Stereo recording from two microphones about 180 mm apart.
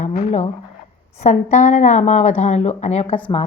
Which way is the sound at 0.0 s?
40° left (ahead or behind).